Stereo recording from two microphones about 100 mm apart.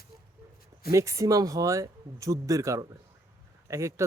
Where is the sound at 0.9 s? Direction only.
30° right (ahead or behind).